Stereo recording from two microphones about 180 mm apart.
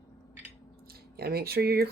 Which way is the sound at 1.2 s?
60° right (ahead or behind).